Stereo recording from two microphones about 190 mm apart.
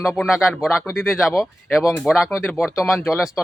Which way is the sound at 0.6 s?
10° left (ahead or behind).